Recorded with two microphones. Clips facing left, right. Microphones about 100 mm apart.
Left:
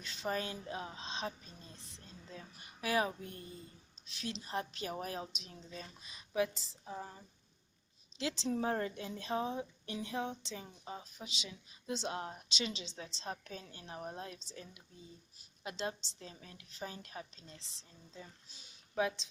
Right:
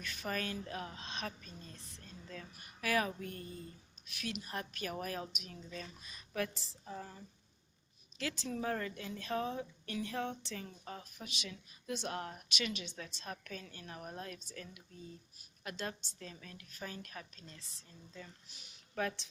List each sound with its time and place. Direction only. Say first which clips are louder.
0.0 s a woman's voice: left 2 dB; 25° left (ahead or behind)
8.2 s a woman's voice: left 3 dB; 25° left (ahead or behind)